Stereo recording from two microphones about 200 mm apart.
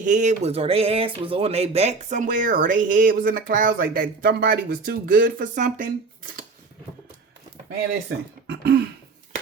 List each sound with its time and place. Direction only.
0.0 s speech: 40° right (ahead or behind)
8.4 s throat clearing: 55° right (ahead or behind)